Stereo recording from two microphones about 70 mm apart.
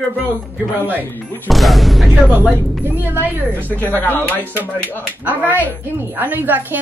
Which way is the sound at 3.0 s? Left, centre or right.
Right.